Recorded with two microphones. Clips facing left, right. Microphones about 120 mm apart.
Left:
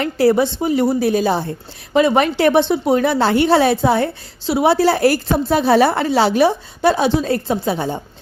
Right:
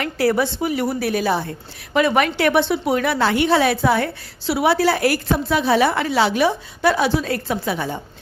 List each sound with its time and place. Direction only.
0.0 s a woman's voice: 25° left (ahead or behind)